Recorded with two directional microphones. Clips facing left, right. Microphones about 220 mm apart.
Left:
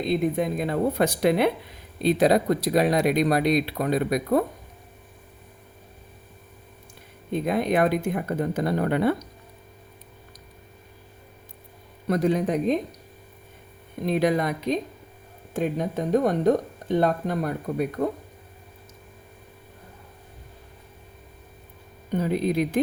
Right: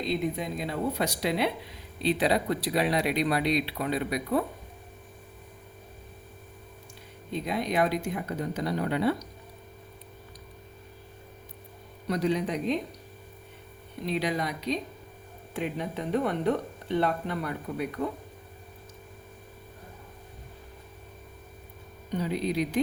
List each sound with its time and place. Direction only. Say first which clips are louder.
0.0 s speech: left 6 dB; 55° left (ahead or behind)
7.3 s speech: left 6 dB; 50° left (ahead or behind)
12.0 s speech: left 5 dB; 50° left (ahead or behind)
14.0 s speech: left 7 dB; 50° left (ahead or behind)
22.1 s speech: left 5 dB; 50° left (ahead or behind)